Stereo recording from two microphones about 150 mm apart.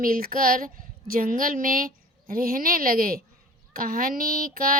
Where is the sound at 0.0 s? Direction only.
75° right (ahead or behind).